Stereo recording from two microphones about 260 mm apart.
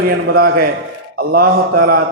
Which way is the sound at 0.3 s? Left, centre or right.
Right.